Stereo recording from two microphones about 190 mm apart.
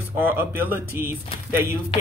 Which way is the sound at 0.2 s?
10° right (ahead or behind).